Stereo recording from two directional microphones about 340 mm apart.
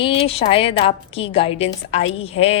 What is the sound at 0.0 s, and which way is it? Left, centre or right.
A woman's voice, centre.